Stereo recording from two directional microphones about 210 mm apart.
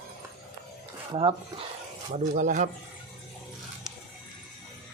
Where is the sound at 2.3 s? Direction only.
35° right (ahead or behind).